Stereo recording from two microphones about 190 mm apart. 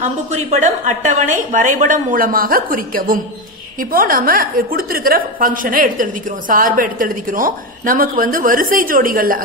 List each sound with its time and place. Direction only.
0.0 s a woman's voice: 35° right (ahead or behind)